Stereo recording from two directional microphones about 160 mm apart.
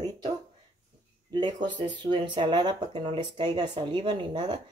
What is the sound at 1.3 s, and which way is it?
Speech, 30° right (ahead or behind).